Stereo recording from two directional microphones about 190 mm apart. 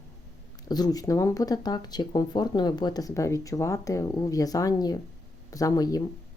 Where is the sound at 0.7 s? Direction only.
20° left (ahead or behind).